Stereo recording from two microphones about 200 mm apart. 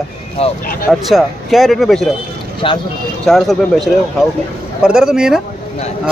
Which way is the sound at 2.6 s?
25° left (ahead or behind).